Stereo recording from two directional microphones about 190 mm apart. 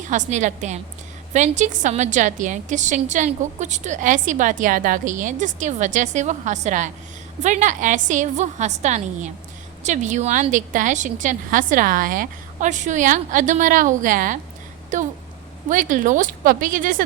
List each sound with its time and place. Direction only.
0.1 s a woman's voice: 40° right (ahead or behind)